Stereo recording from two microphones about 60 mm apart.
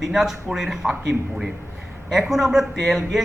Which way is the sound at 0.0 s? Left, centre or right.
Centre.